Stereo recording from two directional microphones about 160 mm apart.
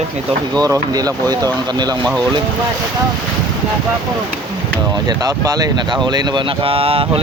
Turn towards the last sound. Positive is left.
turn(degrees=-35)  # may be behind; listen again after turning